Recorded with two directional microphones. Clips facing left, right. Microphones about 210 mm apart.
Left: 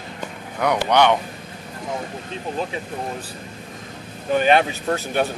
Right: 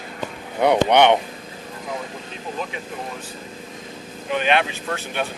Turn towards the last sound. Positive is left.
turn(degrees=40)  # may be behind; listen again after turning